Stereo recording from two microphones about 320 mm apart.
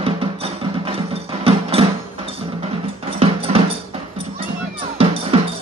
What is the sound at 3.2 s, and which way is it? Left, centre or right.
Music, centre.